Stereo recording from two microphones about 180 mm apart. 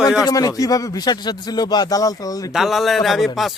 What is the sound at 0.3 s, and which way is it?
Speech, 20° left (ahead or behind).